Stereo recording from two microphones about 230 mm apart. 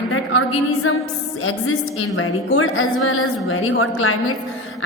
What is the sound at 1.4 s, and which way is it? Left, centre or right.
A woman's voice, left.